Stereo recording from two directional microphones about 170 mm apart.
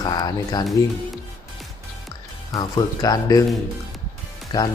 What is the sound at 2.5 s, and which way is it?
Speech, 25° left (ahead or behind).